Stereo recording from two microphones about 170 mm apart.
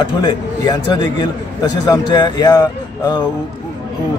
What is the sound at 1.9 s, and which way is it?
A man's voice, 25° left (ahead or behind).